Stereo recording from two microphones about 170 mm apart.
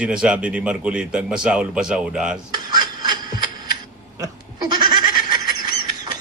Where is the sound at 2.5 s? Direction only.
25° right (ahead or behind).